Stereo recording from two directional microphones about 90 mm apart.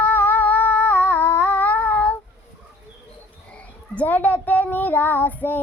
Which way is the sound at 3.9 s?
20° left (ahead or behind).